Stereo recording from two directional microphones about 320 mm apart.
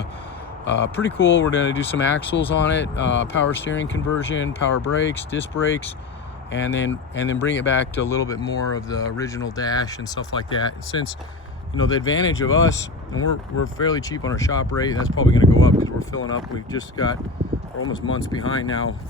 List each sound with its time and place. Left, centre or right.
0.6 s speech: left
8.0 s speech: centre
11.7 s speech: left
13.9 s speech: centre
14.9 s speech: left
15.8 s a sound: centre
17.7 s speech: left